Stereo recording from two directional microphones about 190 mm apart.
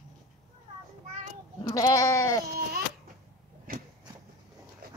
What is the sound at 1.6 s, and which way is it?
Goat, 20° left (ahead or behind).